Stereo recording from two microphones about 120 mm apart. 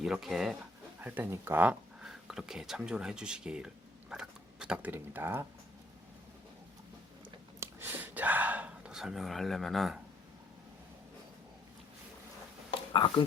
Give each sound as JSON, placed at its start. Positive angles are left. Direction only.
{"t": 0.0, "sound": "speech", "side_deg": 0}
{"t": 1.0, "sound": "speech", "side_deg": -15}
{"t": 2.0, "sound": "speech", "side_deg": -5}
{"t": 7.6, "sound": "a sound", "side_deg": -20}
{"t": 12.9, "sound": "speech", "side_deg": 45}